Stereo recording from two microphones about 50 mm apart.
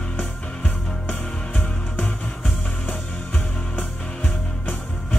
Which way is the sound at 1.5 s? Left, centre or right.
Left.